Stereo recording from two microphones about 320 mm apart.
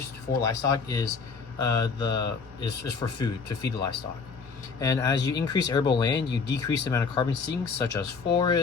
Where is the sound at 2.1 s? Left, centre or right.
Left.